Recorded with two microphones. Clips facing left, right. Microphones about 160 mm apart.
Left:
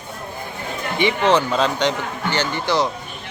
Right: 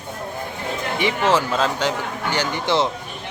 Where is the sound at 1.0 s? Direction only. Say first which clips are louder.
Left 3 dB; centre (ahead or behind).